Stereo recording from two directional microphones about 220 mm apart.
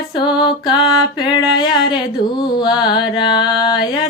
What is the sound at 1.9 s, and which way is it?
Mantra, 20° left (ahead or behind).